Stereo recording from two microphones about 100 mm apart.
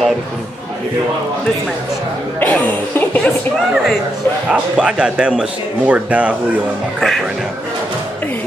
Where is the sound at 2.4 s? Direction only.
15° left (ahead or behind).